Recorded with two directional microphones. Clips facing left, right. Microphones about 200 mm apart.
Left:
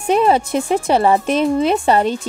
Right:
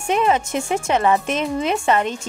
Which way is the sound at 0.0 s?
35° left (ahead or behind).